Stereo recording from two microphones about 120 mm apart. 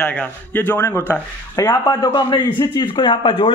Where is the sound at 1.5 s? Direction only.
30° left (ahead or behind).